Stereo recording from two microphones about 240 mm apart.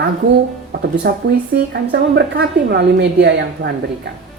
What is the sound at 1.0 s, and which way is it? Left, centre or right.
Speech, right.